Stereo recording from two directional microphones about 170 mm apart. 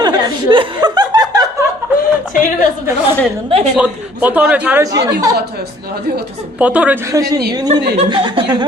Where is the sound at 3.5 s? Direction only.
35° right (ahead or behind).